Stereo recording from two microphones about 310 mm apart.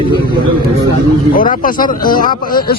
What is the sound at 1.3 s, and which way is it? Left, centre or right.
A man's voice, left.